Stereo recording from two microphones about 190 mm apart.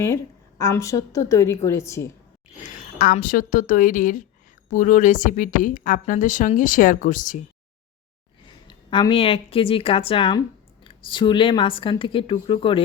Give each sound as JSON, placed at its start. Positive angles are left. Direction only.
{"t": 0.6, "sound": "a woman's voice", "side_deg": 15}
{"t": 2.6, "sound": "a woman's voice", "side_deg": 45}
{"t": 8.6, "sound": "speech", "side_deg": 25}